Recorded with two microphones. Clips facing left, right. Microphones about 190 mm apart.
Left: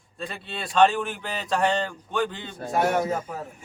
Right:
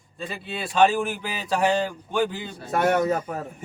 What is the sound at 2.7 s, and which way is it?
Speech, 60° right (ahead or behind).